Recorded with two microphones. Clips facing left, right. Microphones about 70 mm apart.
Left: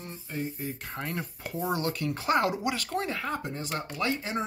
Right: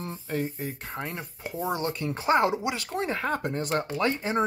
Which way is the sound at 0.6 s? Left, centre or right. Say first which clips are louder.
Right 2 dB; right.